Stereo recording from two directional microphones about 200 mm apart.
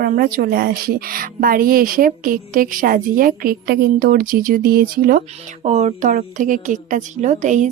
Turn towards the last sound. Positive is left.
turn(degrees=-35)  # may be behind; listen again after turning